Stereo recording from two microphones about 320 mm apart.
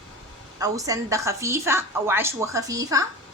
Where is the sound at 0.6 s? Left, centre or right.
Centre.